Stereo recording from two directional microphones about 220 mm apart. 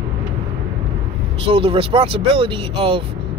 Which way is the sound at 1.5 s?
25° right (ahead or behind).